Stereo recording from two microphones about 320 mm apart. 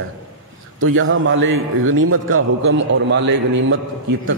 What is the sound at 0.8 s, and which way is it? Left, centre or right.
A man's voice, right.